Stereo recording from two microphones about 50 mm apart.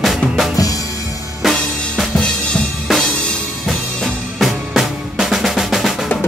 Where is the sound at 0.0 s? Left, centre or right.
Centre.